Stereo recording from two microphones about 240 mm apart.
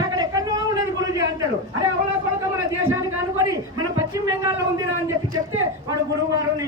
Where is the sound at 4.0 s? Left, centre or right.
Centre.